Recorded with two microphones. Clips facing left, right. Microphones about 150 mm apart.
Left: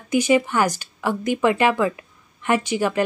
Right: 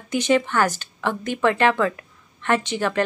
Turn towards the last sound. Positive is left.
turn(degrees=10)  # may be behind; listen again after turning